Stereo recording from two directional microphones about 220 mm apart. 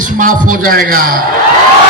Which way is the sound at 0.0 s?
35° right (ahead or behind).